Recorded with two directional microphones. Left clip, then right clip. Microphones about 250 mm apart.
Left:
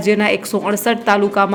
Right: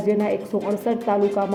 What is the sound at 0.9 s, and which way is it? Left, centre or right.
Speech, centre.